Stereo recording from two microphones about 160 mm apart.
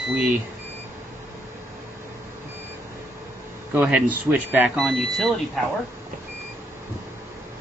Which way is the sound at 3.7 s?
10° right (ahead or behind).